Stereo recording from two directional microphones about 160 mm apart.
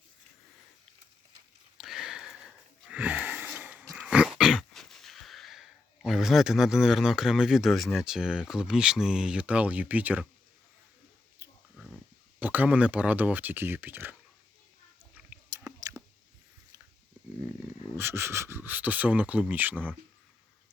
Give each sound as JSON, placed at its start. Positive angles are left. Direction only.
{"t": 1.8, "sound": "sniff", "side_deg": 0}
{"t": 3.9, "sound": "dog", "side_deg": -5}
{"t": 11.4, "sound": "a sound", "side_deg": -15}
{"t": 12.4, "sound": "speech", "side_deg": -10}
{"t": 15.3, "sound": "chewing", "side_deg": -15}
{"t": 17.4, "sound": "speech", "side_deg": -10}